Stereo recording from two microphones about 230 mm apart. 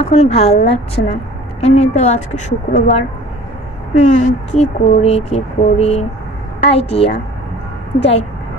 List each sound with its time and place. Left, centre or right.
0.0 s speech: left